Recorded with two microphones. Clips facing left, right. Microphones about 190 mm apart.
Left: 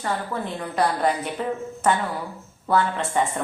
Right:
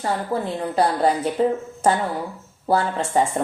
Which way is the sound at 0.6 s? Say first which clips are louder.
Right 2 dB; 30° right (ahead or behind).